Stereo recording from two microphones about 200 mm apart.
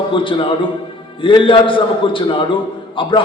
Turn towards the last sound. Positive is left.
turn(degrees=25)  # may be behind; listen again after turning